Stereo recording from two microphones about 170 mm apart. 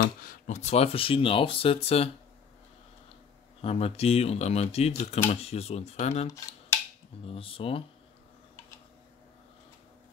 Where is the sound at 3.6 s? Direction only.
35° left (ahead or behind).